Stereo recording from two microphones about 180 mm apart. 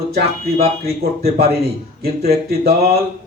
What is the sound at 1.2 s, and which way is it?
A man's voice, 60° right (ahead or behind).